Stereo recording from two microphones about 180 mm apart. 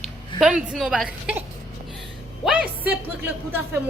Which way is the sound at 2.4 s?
5° right (ahead or behind).